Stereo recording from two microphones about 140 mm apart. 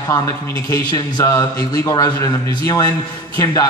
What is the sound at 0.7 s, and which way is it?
A man's voice, 25° left (ahead or behind).